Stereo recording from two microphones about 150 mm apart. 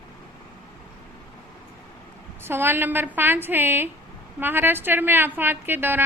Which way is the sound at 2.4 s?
15° right (ahead or behind).